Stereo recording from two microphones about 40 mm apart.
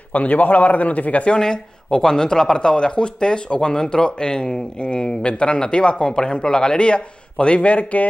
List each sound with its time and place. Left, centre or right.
0.1 s a man's voice: left
1.3 s speech: centre; by 8.1 s left